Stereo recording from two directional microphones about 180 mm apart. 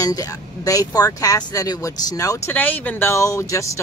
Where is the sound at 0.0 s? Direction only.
20° left (ahead or behind).